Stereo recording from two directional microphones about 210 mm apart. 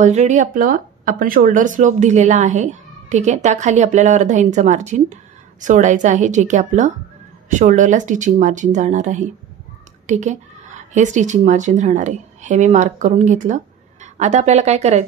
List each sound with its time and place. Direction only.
0.0 s speech: 35° right (ahead or behind)